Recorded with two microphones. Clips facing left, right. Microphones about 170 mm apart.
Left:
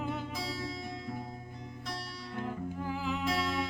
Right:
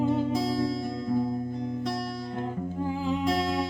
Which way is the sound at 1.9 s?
40° right (ahead or behind).